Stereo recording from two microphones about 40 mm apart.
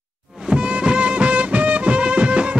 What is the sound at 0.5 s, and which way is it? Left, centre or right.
Music, right.